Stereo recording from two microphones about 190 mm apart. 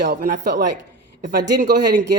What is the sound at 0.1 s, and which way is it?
Speech, 45° right (ahead or behind).